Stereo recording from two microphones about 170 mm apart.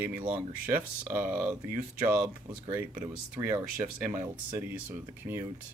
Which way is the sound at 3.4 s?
20° right (ahead or behind).